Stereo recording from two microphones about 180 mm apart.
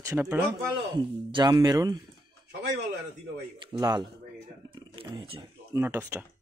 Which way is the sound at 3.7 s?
25° right (ahead or behind).